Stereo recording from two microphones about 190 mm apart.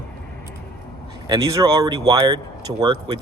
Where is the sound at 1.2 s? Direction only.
20° right (ahead or behind).